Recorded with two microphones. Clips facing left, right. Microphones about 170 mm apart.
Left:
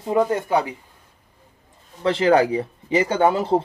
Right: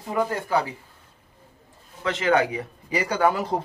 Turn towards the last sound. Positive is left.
turn(degrees=25)  # may be behind; listen again after turning